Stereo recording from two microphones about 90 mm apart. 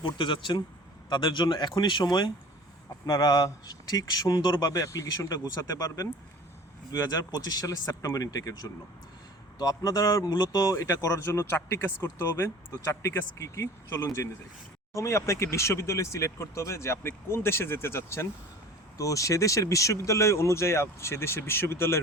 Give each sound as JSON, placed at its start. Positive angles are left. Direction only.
{"t": 0.0, "sound": "a man's voice", "side_deg": 65}